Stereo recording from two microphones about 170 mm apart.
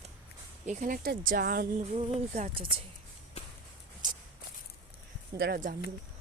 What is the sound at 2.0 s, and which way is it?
Speech, 40° right (ahead or behind).